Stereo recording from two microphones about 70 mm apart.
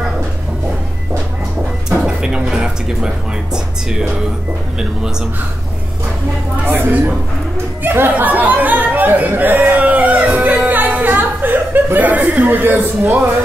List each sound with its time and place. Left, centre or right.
1.9 s music: centre
6.7 s a woman's voice: right